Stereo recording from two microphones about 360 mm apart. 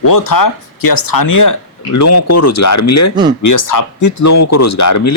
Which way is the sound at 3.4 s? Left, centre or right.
Left.